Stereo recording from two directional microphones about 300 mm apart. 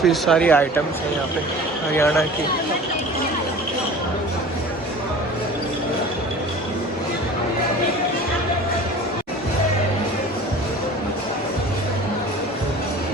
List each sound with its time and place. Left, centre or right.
0.0 s speech: centre
2.0 s speech: centre